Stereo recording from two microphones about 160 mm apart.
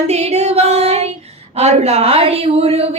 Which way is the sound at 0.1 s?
45° right (ahead or behind).